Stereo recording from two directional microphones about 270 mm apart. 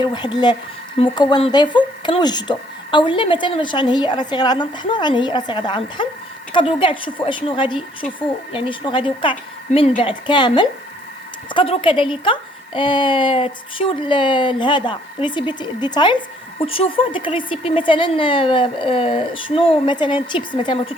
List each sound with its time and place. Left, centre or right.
0.0 s a woman's voice: centre